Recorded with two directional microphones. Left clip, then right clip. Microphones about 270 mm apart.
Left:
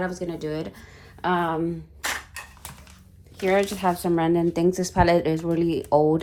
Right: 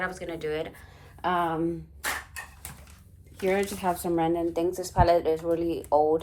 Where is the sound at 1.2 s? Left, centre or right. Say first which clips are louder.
Left 3 dB; left.